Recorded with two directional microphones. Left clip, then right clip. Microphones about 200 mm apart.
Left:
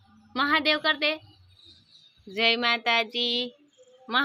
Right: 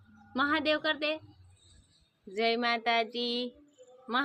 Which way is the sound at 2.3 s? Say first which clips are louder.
Left 6 dB; 15° left (ahead or behind).